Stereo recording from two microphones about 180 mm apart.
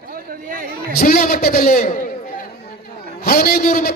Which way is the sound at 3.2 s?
55° left (ahead or behind).